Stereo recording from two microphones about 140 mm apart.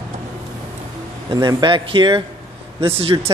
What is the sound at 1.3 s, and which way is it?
Speech, 30° right (ahead or behind).